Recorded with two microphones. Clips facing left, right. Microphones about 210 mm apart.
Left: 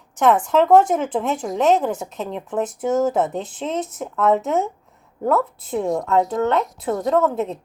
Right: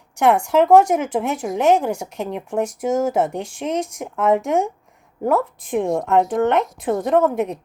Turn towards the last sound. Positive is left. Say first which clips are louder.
# right 2 dB
turn(degrees=-15)  # may be behind; listen again after turning